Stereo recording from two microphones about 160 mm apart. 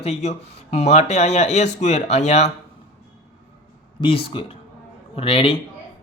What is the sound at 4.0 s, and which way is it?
Speech, 35° left (ahead or behind).